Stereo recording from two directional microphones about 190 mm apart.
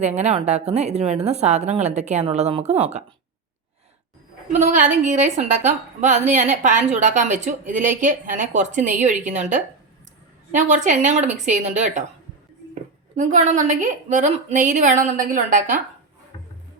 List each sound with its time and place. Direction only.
0.0 s a woman's voice: 35° right (ahead or behind)
4.5 s a woman's voice: 40° right (ahead or behind)
13.1 s a woman's voice: 40° right (ahead or behind)